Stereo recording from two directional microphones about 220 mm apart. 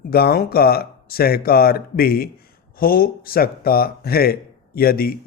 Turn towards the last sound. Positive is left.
turn(degrees=45)  # may be behind; listen again after turning